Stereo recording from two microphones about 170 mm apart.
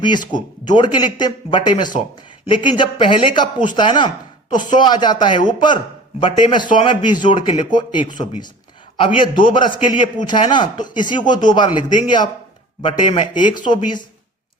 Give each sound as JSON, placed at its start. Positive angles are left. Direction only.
{"t": 0.6, "sound": "a man's voice", "side_deg": 25}